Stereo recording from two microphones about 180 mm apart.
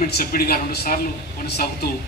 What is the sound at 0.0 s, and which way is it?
A man's voice, 55° left (ahead or behind).